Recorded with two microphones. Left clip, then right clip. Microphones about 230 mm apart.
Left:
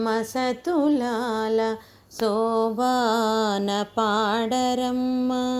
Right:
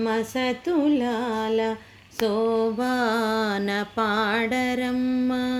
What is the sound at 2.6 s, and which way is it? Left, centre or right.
Music, centre.